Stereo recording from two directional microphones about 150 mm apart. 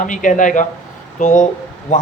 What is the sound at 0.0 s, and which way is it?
A man's voice, 60° left (ahead or behind).